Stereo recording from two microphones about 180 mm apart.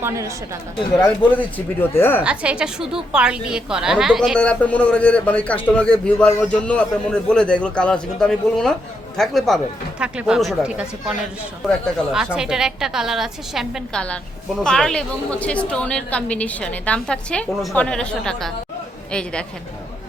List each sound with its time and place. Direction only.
0.0 s a woman's voice: 15° right (ahead or behind)
0.9 s a man's voice: 5° left (ahead or behind)
2.2 s a woman's voice: 5° right (ahead or behind)